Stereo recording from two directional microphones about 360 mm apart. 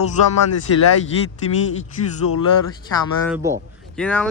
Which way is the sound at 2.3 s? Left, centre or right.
Left.